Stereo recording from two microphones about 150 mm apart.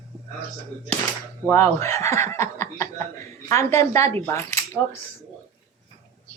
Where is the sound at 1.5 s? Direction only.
20° left (ahead or behind).